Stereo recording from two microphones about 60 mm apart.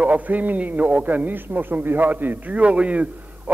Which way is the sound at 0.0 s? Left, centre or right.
Right.